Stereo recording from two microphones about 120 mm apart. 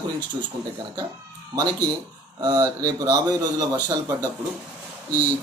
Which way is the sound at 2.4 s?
35° right (ahead or behind).